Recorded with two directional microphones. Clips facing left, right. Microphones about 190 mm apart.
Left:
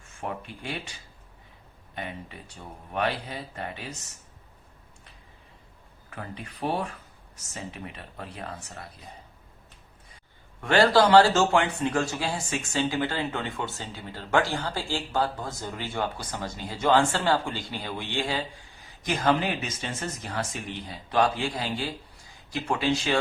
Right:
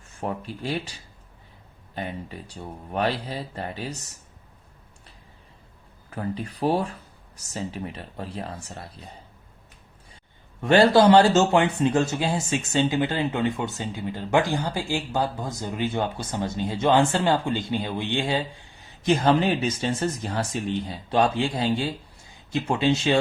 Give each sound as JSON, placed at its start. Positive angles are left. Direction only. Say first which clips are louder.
{"t": 0.2, "sound": "speech", "louder": "right 5 dB", "side_deg": -35}
{"t": 2.9, "sound": "speech", "louder": "right 3 dB", "side_deg": -35}
{"t": 6.1, "sound": "speech", "louder": "right 9 dB", "side_deg": -35}
{"t": 10.6, "sound": "speech", "louder": "right 4 dB", "side_deg": -20}